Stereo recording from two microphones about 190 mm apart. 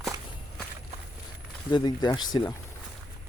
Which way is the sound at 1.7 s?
20° left (ahead or behind).